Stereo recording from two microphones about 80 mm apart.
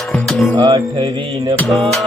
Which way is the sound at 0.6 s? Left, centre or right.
Right.